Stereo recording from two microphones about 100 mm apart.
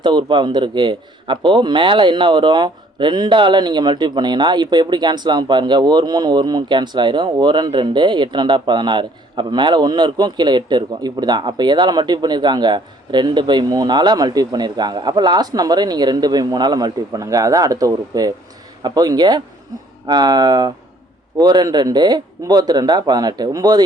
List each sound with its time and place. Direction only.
0.0 s a man's voice: 50° right (ahead or behind)